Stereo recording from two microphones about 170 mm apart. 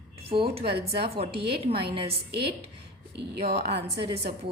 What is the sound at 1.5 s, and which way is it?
Speech, 35° right (ahead or behind).